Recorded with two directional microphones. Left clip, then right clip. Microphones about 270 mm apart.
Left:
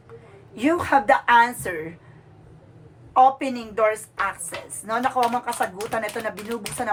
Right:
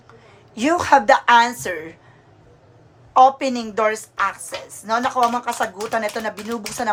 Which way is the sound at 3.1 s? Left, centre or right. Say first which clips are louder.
Right 3 dB; centre.